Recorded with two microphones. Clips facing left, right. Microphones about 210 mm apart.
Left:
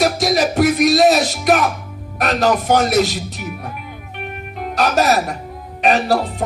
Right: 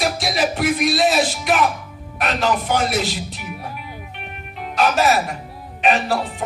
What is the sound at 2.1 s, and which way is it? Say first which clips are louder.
Speech: left 4 dB; 40° left (ahead or behind).